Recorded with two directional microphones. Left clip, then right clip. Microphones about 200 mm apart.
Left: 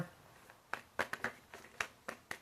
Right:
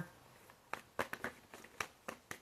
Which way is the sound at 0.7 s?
20° right (ahead or behind).